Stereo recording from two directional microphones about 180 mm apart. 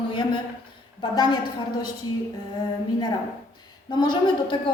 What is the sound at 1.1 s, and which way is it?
Speech, 25° left (ahead or behind).